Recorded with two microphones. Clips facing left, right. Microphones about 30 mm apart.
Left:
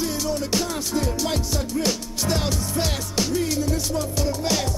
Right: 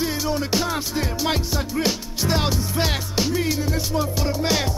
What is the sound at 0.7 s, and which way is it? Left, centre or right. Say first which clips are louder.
Music: even; right.